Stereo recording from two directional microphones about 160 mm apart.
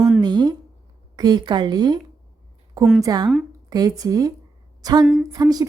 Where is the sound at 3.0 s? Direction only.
25° right (ahead or behind).